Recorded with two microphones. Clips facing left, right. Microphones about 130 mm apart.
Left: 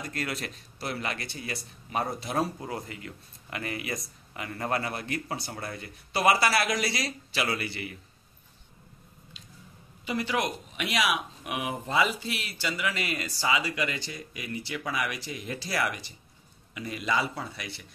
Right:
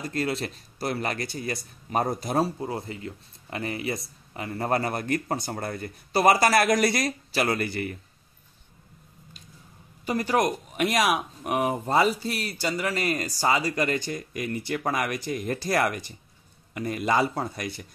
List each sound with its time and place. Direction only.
0.0 s speech: 30° right (ahead or behind)
10.0 s speech: 45° right (ahead or behind)